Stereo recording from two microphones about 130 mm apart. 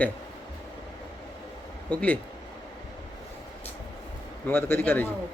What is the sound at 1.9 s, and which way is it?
Speech, 10° left (ahead or behind).